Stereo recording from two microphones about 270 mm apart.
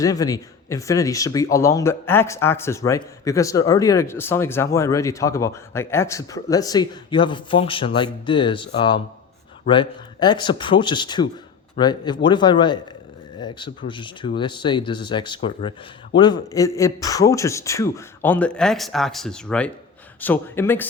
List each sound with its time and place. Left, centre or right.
0.0 s speech: centre